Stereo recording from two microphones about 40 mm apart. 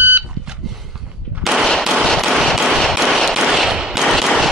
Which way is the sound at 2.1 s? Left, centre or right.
Centre.